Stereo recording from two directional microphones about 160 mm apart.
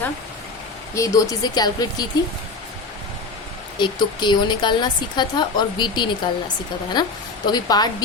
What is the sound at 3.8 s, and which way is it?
A woman's voice, 30° left (ahead or behind).